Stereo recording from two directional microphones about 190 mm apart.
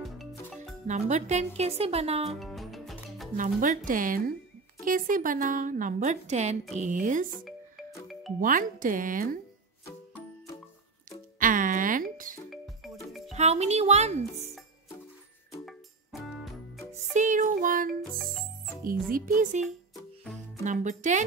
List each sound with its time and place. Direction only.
0.0 s music: centre (ahead or behind)
0.8 s speech: 35° right (ahead or behind)
2.3 s music: centre (ahead or behind)
3.3 s a woman's voice: 45° right (ahead or behind)
8.4 s a woman's voice: 45° right (ahead or behind)
11.3 s music: 45° right (ahead or behind)
12.4 s music: centre (ahead or behind)
13.3 s speech: 35° right (ahead or behind)
15.6 s music: centre (ahead or behind)
16.9 s music: 40° right (ahead or behind)
18.2 s music: centre (ahead or behind)
18.9 s a woman's voice: 50° right (ahead or behind)
20.6 s speech: 40° right (ahead or behind)